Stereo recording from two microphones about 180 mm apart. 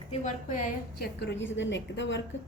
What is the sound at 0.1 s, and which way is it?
A woman's voice, 45° left (ahead or behind).